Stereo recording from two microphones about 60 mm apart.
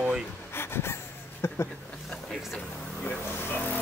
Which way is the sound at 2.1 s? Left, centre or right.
Centre.